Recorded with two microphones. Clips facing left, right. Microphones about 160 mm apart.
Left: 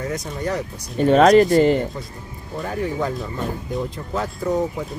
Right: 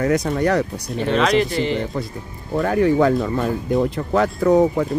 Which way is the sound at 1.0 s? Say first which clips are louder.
Left 6 dB; 45° left (ahead or behind).